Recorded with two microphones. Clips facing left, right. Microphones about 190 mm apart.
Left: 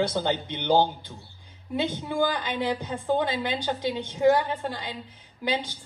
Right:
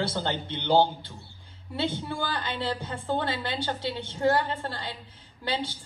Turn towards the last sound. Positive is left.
turn(degrees=15)  # may be behind; listen again after turning